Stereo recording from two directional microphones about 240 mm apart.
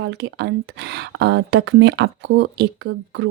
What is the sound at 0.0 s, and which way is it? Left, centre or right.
Speech, right.